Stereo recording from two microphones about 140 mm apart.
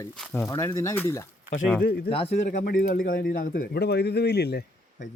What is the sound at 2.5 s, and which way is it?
A man's voice, 85° left.